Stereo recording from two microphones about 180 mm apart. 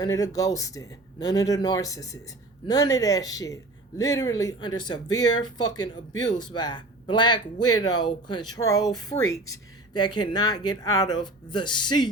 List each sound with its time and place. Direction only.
0.0 s speech: 20° left (ahead or behind)